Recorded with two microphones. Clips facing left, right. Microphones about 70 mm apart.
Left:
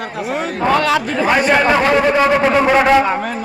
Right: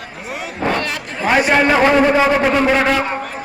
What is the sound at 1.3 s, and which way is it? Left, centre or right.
A man's voice, centre.